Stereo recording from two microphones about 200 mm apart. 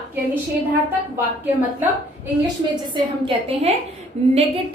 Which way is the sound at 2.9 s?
25° right (ahead or behind).